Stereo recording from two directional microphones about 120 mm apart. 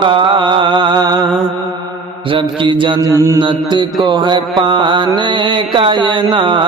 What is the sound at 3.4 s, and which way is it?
Mantra, 40° right (ahead or behind).